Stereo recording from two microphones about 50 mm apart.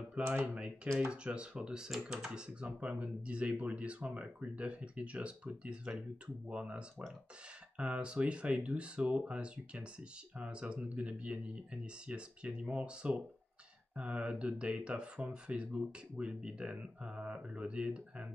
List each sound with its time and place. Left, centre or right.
0.2 s speech: right